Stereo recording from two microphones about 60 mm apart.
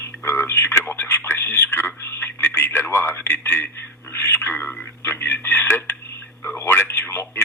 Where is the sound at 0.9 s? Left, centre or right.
Left.